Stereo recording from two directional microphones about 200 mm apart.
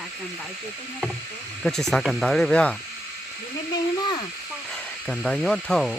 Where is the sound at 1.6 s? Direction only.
Centre (ahead or behind).